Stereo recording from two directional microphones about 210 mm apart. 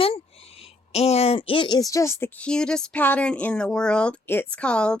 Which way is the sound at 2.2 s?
5° left (ahead or behind).